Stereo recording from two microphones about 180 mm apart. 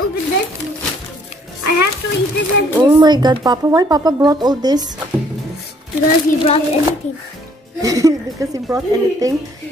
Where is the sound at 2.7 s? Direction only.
25° right (ahead or behind).